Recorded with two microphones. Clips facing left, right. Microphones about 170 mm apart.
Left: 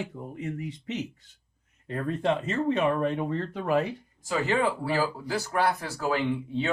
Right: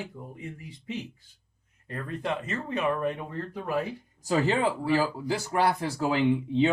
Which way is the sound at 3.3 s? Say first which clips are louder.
Left 5 dB; 80° left.